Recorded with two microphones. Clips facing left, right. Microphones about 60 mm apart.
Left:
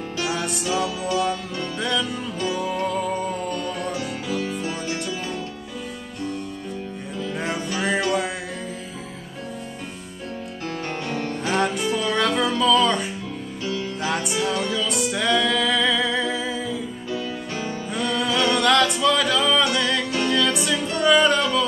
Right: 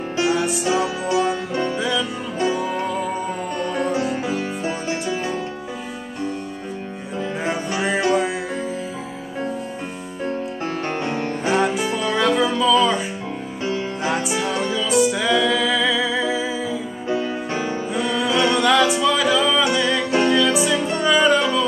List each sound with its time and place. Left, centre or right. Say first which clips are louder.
0.3 s music: right 6 dB; centre
0.7 s music: right 1 dB; right
1.8 s music: right 2 dB; centre
2.4 s music: right 3 dB; right
2.9 s music: right 1 dB; centre
3.5 s music: right 5 dB; right
11.1 s music: right 1 dB; right
11.5 s music: right 2 dB; centre
13.7 s music: right 3 dB; right
14.1 s music: even; centre
17.1 s music: right 7 dB; right
17.9 s music: right 1 dB; centre
18.3 s music: right 3 dB; centre
18.6 s music: right 1 dB; centre